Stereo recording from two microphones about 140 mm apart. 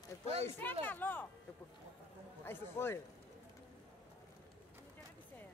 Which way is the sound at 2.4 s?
15° left (ahead or behind).